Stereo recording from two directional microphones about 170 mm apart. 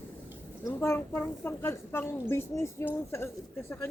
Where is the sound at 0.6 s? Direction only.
15° left (ahead or behind).